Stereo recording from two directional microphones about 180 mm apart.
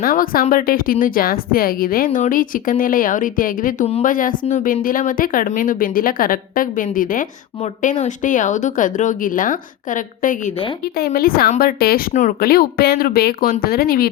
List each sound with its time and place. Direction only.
0.0 s a woman's voice: 55° left (ahead or behind)
10.9 s speech: 55° left (ahead or behind)